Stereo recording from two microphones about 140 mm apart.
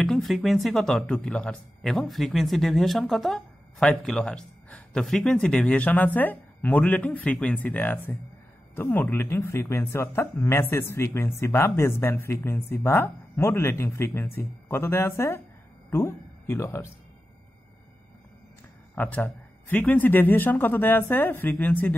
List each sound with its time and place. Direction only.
0.0 s speech: centre (ahead or behind); by 16.9 s 20° left (ahead or behind)
18.9 s speech: 10° left (ahead or behind)